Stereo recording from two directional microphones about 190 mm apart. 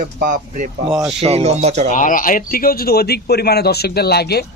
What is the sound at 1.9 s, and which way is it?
Speech, 45° left (ahead or behind).